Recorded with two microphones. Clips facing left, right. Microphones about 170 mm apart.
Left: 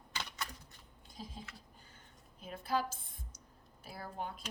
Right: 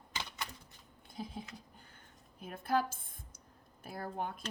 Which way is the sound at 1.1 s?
60° right (ahead or behind).